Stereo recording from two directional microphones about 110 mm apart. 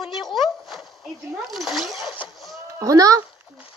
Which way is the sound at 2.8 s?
30° right (ahead or behind).